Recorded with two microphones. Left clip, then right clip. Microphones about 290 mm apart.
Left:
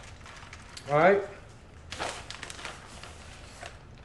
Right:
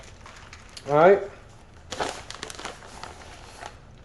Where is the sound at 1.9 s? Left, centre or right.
Centre.